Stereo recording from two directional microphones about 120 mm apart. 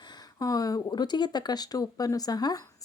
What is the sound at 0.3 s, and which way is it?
Speech, 30° left (ahead or behind).